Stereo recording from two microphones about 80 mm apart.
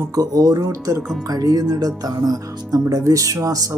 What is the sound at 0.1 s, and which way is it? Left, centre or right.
Speech, right.